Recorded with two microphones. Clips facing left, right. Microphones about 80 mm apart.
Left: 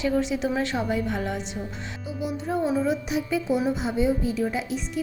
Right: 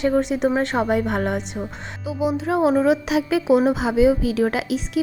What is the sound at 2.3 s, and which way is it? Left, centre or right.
Speech, right.